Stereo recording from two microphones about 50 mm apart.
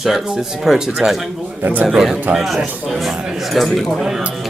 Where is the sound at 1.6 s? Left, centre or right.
Right.